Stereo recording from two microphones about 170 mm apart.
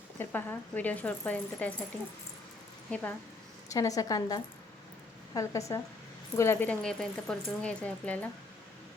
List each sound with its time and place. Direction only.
0.2 s speech: 10° left (ahead or behind)
2.9 s speech: 10° left (ahead or behind)
3.7 s a woman's voice: 20° left (ahead or behind)